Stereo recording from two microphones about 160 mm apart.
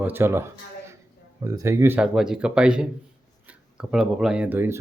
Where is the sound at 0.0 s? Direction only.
15° right (ahead or behind).